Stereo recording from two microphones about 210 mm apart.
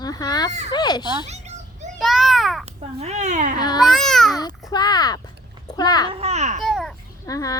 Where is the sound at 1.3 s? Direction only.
30° right (ahead or behind).